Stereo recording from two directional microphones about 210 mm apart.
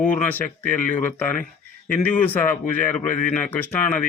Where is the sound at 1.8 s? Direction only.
10° left (ahead or behind).